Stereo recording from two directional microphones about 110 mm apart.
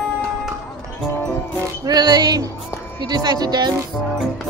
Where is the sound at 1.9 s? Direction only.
40° right (ahead or behind).